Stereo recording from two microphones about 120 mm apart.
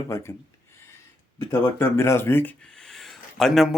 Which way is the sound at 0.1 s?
20° left (ahead or behind).